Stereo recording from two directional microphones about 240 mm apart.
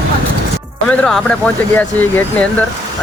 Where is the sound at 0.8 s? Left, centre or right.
Centre.